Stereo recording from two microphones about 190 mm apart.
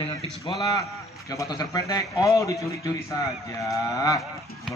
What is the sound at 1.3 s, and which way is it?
A man's voice, 20° left (ahead or behind).